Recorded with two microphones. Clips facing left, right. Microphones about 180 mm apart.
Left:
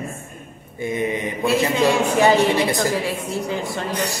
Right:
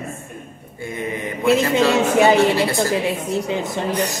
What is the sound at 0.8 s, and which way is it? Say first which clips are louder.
Mantra: left 3 dB; 20° left (ahead or behind).